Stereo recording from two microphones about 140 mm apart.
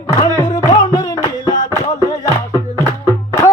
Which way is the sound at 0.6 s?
30° left (ahead or behind).